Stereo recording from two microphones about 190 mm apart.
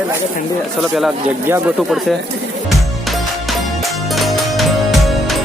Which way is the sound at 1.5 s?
10° right (ahead or behind).